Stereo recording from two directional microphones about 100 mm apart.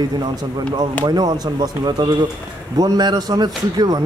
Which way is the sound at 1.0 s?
40° right (ahead or behind).